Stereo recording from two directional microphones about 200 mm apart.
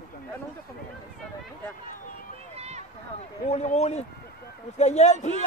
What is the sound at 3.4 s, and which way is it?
A man's voice, 35° left (ahead or behind).